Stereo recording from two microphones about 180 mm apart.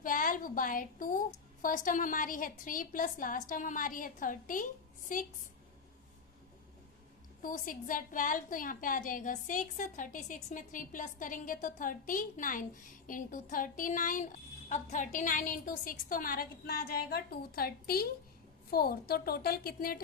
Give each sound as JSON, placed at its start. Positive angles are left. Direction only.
{"t": 0.0, "sound": "a woman's voice", "side_deg": 50}
{"t": 7.4, "sound": "a woman's voice", "side_deg": 50}